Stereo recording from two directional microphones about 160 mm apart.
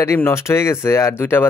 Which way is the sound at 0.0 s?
15° left (ahead or behind).